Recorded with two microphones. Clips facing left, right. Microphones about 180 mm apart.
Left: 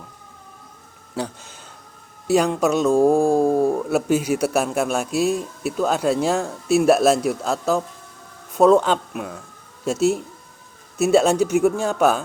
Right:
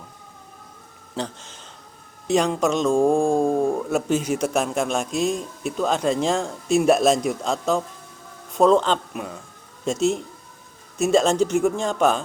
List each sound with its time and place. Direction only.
1.1 s speech: 10° left (ahead or behind)